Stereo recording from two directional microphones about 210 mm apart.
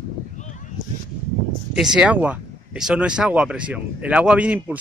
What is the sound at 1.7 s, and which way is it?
Speech, 5° right (ahead or behind).